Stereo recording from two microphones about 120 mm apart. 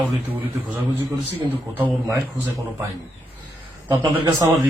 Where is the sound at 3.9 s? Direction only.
25° right (ahead or behind).